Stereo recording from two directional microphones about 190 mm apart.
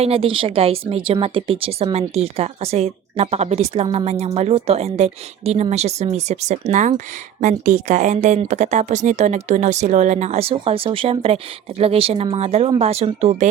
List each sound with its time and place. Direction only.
0.0 s speech: 30° right (ahead or behind)